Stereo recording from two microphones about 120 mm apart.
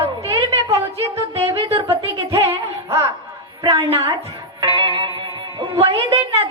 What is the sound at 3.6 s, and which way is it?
Speech, 50° right (ahead or behind).